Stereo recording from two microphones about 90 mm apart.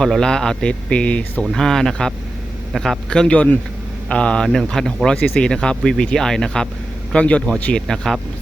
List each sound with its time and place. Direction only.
0.0 s speech: 5° left (ahead or behind)